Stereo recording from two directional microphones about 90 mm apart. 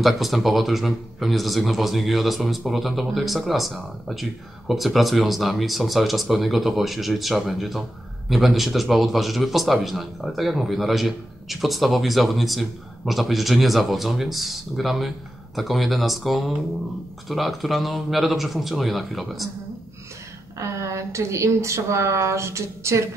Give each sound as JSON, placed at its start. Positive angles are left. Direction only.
{"t": 0.0, "sound": "a man's voice", "side_deg": 0}
{"t": 20.5, "sound": "a woman's voice", "side_deg": -35}